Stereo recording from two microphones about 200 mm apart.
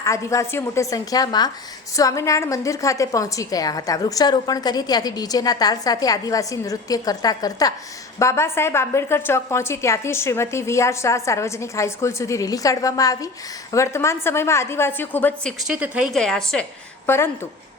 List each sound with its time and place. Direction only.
0.0 s a woman's voice: 15° left (ahead or behind)
15.6 s a woman's voice: 5° right (ahead or behind)